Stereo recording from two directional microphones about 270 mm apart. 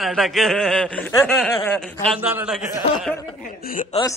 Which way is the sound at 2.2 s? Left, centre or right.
Centre.